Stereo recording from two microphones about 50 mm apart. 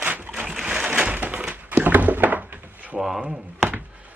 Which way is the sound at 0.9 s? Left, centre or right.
Right.